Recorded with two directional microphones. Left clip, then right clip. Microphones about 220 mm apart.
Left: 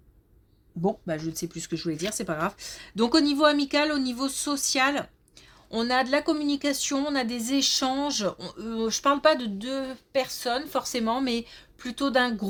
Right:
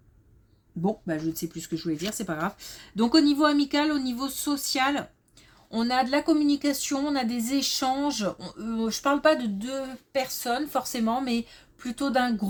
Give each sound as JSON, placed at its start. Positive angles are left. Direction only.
{"t": 0.8, "sound": "speech", "side_deg": 30}